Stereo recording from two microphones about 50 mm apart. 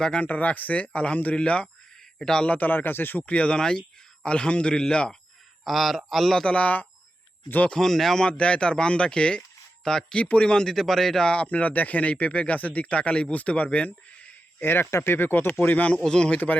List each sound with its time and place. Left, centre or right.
0.2 s speech: left
2.1 s a man's voice: centre
2.4 s speech: left
3.2 s speech: left
5.6 s speech: centre
6.4 s speech: left
7.4 s speech: left
7.8 s speech: centre
8.2 s speech: left
10.2 s speech: left; by 11.3 s centre
11.3 s speech: left
14.6 s speech: left
16.0 s speech: centre